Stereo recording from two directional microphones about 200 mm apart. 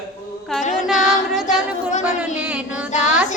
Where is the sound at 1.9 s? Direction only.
40° left (ahead or behind).